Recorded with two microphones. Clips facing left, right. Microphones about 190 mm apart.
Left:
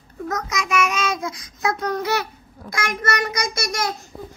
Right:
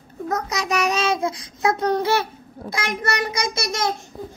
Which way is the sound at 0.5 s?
35° right (ahead or behind).